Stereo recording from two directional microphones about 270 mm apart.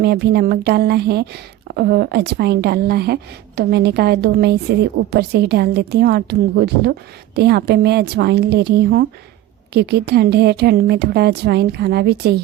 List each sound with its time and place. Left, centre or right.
0.0 s speech: right